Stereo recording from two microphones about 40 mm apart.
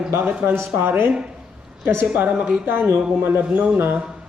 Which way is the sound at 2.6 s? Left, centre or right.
Right.